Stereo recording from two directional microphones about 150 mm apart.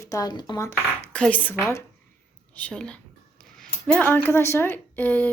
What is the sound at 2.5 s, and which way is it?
Speech, 10° left (ahead or behind).